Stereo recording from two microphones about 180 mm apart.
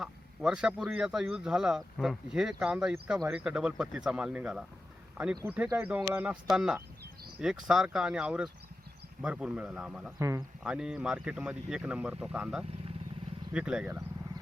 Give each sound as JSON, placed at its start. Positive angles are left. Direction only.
{"t": 0.0, "sound": "speech", "side_deg": -5}
{"t": 10.2, "sound": "speech", "side_deg": -15}
{"t": 10.6, "sound": "speech", "side_deg": -5}